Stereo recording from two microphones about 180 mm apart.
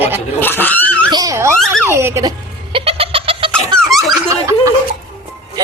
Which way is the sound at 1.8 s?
15° right (ahead or behind).